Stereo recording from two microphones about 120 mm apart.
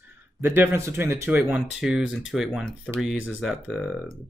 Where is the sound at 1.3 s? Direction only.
5° right (ahead or behind).